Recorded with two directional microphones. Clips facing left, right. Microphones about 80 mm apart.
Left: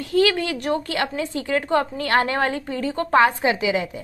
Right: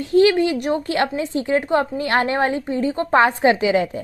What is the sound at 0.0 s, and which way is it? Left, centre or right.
A woman's voice, right.